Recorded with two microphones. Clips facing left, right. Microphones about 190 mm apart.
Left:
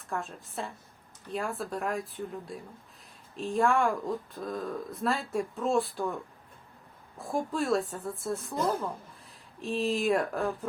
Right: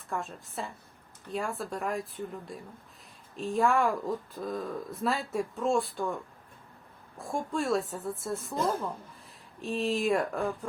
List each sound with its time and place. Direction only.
0.1 s speech: centre (ahead or behind)
7.2 s speech: centre (ahead or behind)